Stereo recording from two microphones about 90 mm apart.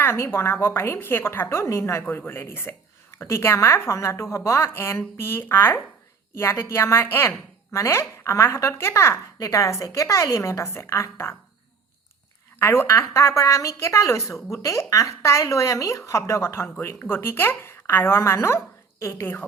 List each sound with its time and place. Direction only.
0.0 s a woman's voice: 25° left (ahead or behind)
12.5 s a woman's voice: 30° left (ahead or behind)